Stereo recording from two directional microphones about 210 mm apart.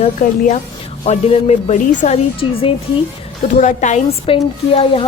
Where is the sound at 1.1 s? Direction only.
30° left (ahead or behind).